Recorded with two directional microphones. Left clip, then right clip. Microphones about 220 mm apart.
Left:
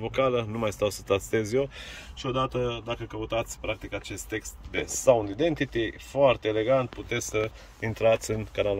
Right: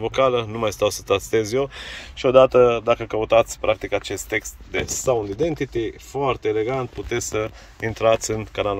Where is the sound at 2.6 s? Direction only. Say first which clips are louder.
Right 15 dB; 40° right (ahead or behind).